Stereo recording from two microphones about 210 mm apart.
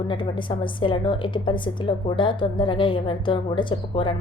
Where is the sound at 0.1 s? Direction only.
25° left (ahead or behind).